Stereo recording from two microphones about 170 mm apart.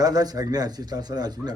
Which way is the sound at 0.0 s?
20° right (ahead or behind).